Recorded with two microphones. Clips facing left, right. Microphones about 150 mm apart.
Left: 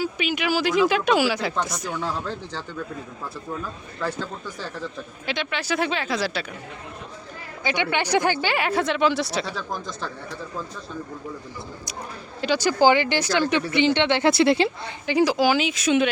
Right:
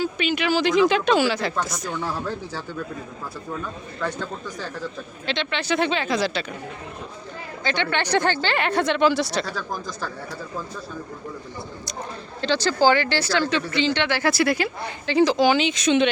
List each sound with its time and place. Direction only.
0.0 s speech: 10° left (ahead or behind)
2.2 s speech: 10° right (ahead or behind)
3.6 s speech: 5° left (ahead or behind)
7.6 s speech: 10° left (ahead or behind)
12.4 s speech: 10° left (ahead or behind)
15.0 s speech: 10° left (ahead or behind)